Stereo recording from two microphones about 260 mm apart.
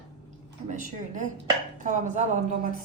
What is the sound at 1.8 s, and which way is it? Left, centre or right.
Speech, right.